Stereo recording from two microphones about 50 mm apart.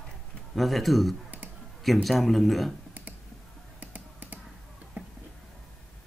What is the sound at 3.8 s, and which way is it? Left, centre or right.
Computer keyboard, right.